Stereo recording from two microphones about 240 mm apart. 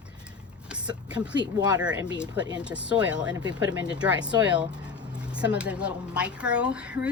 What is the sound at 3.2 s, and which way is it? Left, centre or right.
Speech, centre.